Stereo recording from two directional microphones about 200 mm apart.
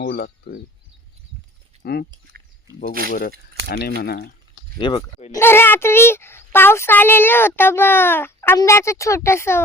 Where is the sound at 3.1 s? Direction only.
45° left (ahead or behind).